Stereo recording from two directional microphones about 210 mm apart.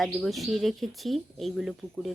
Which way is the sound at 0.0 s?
Centre (ahead or behind).